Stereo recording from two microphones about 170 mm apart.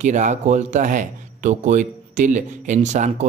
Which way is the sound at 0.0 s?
45° right (ahead or behind).